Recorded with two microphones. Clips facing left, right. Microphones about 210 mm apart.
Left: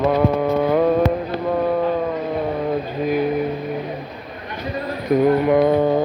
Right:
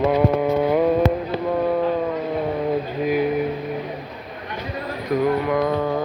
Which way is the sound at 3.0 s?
10° right (ahead or behind).